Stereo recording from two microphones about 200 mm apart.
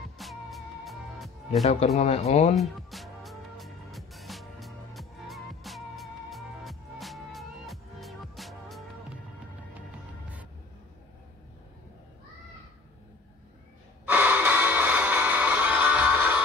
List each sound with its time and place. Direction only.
0.2 s music: centre (ahead or behind)
2.0 s speech: 30° left (ahead or behind)
2.5 s music: centre (ahead or behind)
14.0 s music: 10° right (ahead or behind)